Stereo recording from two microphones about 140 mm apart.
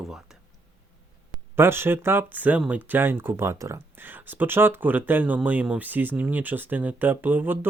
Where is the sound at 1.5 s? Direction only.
15° right (ahead or behind).